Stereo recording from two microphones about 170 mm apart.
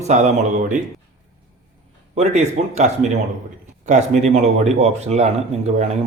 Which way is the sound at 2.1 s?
40° right (ahead or behind).